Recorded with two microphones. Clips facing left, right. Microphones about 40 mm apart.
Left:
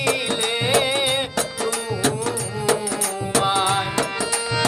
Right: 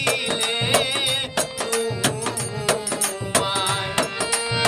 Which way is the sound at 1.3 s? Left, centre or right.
Right.